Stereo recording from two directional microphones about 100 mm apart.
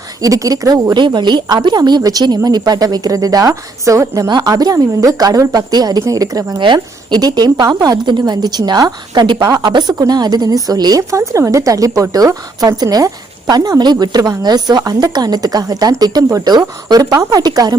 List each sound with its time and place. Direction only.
0.2 s a woman's voice: 35° right (ahead or behind)